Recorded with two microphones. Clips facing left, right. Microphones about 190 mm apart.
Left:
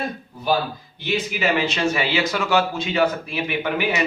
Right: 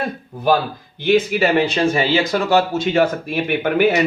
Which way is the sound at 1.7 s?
35° right (ahead or behind).